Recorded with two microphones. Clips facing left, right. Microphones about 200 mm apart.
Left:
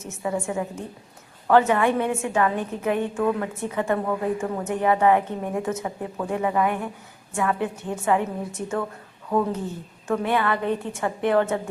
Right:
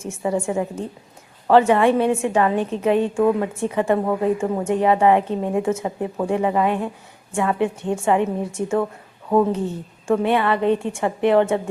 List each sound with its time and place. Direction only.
0.0 s a woman's voice: 30° right (ahead or behind)
10.1 s a woman's voice: 25° right (ahead or behind)